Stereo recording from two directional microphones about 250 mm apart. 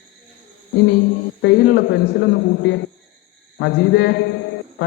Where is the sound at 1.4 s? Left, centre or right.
Left.